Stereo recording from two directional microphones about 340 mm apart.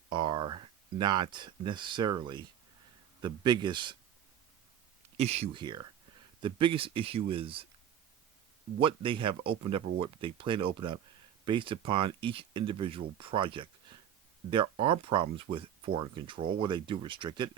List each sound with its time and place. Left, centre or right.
0.1 s speech: centre
5.1 s speech: centre
8.8 s speech: centre